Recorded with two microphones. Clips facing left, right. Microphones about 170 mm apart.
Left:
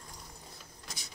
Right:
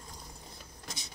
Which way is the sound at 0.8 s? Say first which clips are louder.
Right 3 dB; 20° right (ahead or behind).